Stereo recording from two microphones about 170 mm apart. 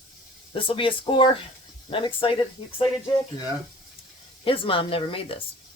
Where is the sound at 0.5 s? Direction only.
30° left (ahead or behind).